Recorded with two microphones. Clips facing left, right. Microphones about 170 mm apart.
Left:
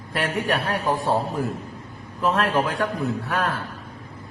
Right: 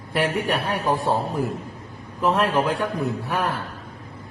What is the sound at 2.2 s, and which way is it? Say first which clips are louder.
A man's voice: right 1 dB; 20° right (ahead or behind).